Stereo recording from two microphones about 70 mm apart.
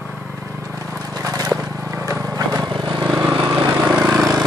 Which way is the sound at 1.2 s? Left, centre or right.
Right.